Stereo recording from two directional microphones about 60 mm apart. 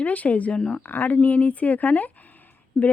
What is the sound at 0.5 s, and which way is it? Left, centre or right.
Speech, centre.